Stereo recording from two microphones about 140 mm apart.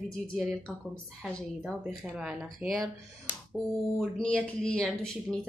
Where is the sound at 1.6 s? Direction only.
5° right (ahead or behind).